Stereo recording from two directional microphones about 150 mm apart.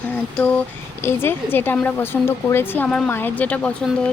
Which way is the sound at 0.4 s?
5° left (ahead or behind).